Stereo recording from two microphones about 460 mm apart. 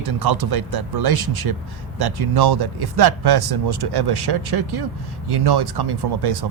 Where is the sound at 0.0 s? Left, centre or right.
Right.